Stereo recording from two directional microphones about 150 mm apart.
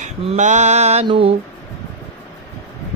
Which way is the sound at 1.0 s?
35° right (ahead or behind).